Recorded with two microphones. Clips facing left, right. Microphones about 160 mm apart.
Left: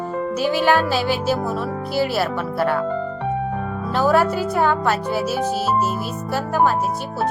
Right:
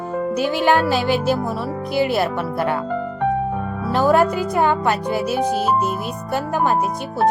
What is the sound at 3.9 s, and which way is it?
Speech, 15° right (ahead or behind).